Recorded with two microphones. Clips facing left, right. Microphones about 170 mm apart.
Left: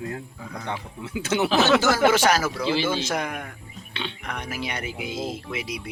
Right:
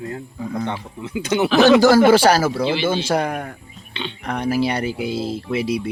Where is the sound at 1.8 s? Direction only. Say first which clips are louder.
Right 8 dB; 35° right (ahead or behind).